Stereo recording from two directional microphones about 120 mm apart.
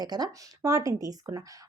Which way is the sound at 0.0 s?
35° right (ahead or behind).